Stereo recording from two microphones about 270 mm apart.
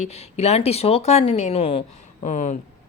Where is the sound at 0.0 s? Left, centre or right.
Left.